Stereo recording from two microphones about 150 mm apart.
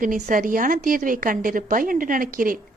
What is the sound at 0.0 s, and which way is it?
A woman's voice, 65° right (ahead or behind).